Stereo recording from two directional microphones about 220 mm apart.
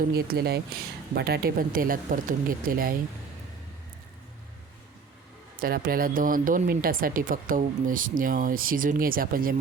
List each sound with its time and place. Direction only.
0.0 s speech: 45° right (ahead or behind)
5.5 s speech: 40° right (ahead or behind)